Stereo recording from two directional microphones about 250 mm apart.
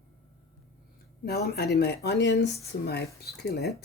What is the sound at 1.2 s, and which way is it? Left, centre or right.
Speech, left.